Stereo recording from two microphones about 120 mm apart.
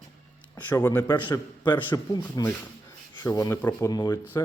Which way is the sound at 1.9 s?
35° left (ahead or behind).